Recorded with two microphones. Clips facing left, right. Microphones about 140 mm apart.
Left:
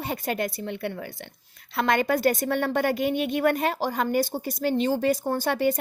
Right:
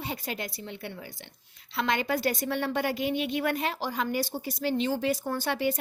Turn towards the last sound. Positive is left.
turn(degrees=45)  # may be behind; listen again after turning